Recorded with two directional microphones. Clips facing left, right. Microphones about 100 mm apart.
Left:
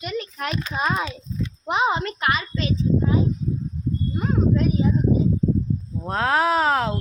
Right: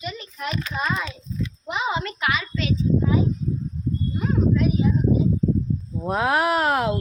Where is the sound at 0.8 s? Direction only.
50° left (ahead or behind).